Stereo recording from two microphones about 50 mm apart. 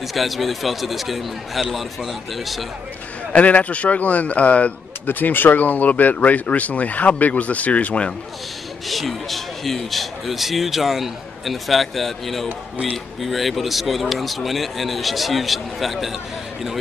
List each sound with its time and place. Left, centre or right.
0.1 s speech: centre
3.3 s a man's voice: left
5.0 s speech: left
8.8 s speech: centre